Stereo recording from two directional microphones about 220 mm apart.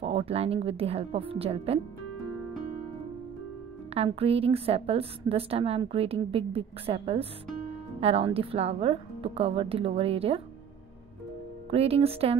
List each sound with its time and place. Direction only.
0.0 s a woman's voice: 25° right (ahead or behind)
3.9 s a woman's voice: 25° right (ahead or behind)
11.7 s a woman's voice: 25° right (ahead or behind)